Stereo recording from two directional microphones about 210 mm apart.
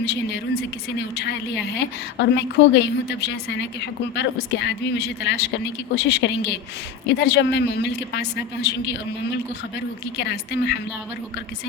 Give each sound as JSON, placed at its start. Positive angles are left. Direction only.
{"t": 0.0, "sound": "a woman's voice", "side_deg": 55}